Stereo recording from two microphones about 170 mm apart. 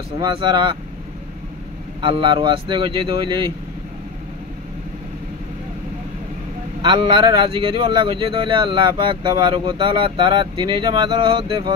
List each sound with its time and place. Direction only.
0.2 s speech: 25° right (ahead or behind)
2.0 s speech: 30° right (ahead or behind)
6.8 s speech: 30° right (ahead or behind)